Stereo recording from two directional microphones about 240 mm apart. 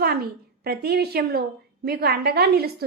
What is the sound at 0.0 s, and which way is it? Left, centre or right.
A woman's voice, right.